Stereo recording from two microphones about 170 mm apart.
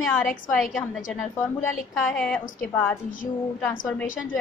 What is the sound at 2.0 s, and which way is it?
Speech, 5° left (ahead or behind).